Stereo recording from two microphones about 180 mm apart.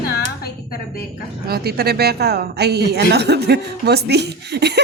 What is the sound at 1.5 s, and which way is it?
A woman's voice, 60° right (ahead or behind).